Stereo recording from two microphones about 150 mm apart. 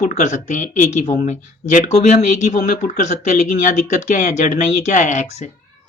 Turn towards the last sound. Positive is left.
turn(degrees=50)  # may be behind; listen again after turning